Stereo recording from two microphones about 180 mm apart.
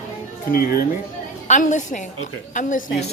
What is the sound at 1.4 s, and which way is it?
A woman's voice, 40° left (ahead or behind).